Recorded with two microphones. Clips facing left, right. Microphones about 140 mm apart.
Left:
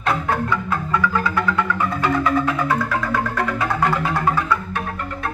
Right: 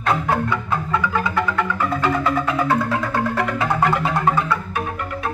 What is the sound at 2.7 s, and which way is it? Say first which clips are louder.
Music: right 1 dB; 25° right (ahead or behind).